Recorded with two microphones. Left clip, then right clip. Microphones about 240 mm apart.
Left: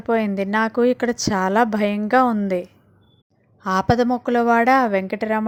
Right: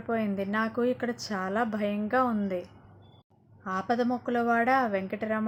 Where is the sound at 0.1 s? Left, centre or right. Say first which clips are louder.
Left 10 dB; left.